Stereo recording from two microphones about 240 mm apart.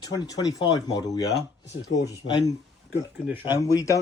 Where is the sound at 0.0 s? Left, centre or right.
Centre.